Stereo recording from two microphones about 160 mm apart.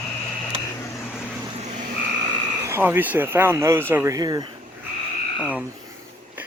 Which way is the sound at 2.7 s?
15° right (ahead or behind).